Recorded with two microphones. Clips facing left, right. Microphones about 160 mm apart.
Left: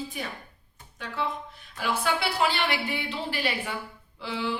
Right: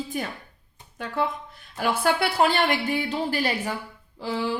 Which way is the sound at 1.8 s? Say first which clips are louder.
Right 5 dB; 50° right (ahead or behind).